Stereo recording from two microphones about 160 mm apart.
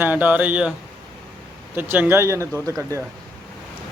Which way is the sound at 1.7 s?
10° right (ahead or behind).